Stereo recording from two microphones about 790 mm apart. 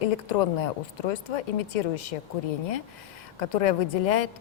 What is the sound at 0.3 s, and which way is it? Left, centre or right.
Speech, left.